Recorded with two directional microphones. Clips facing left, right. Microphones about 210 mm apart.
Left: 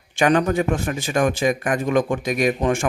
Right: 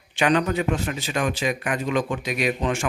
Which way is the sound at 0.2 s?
45° left (ahead or behind).